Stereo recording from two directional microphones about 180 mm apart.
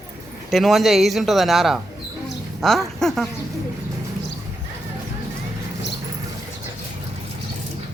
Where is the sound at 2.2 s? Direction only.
Centre (ahead or behind).